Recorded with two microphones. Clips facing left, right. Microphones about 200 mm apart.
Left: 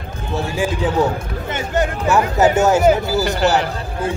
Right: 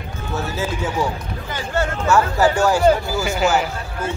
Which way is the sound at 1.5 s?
20° left (ahead or behind).